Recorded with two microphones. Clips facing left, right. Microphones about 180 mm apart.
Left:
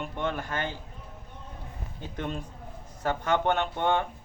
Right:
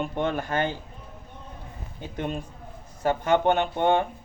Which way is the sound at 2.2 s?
15° right (ahead or behind).